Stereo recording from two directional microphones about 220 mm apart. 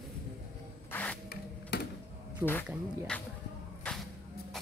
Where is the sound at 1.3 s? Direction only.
50° left (ahead or behind).